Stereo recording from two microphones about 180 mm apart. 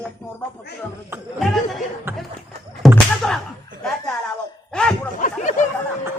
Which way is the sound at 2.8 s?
Centre (ahead or behind).